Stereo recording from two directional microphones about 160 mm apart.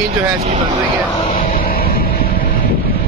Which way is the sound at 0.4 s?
40° right (ahead or behind).